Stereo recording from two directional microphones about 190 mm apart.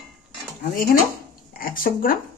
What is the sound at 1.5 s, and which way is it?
Speech, 50° left (ahead or behind).